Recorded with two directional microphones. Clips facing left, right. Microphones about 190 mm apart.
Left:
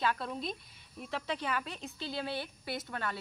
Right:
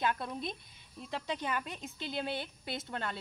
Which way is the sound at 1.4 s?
20° right (ahead or behind).